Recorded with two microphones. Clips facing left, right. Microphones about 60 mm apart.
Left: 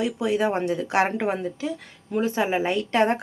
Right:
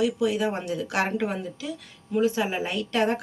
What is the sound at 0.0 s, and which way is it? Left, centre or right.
A woman's voice, left.